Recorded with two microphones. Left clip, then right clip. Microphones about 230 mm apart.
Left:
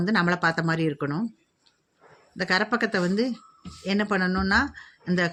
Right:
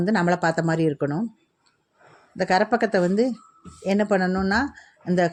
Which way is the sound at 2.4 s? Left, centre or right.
Centre.